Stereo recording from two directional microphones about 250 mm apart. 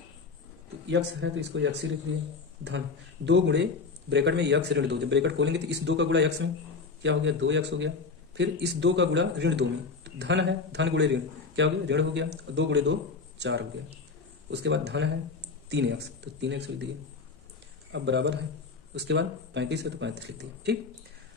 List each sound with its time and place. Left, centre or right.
0.8 s a man's voice: right
3.3 s a man's voice: right
17.9 s a man's voice: right